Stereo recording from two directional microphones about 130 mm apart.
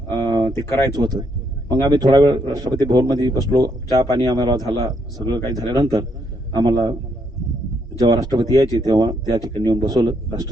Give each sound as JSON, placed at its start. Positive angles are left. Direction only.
{"t": 0.2, "sound": "a sound", "side_deg": -30}
{"t": 0.5, "sound": "speech", "side_deg": 25}
{"t": 0.9, "sound": "a man's voice", "side_deg": -30}
{"t": 8.0, "sound": "a man's voice", "side_deg": -25}